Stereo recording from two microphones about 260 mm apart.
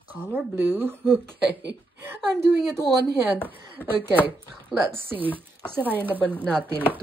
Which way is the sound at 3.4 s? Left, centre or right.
Centre.